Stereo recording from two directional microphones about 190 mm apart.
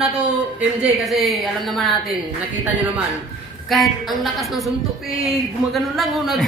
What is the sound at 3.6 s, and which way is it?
A woman's voice, centre (ahead or behind).